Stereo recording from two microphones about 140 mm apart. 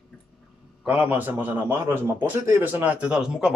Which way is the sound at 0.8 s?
10° right (ahead or behind).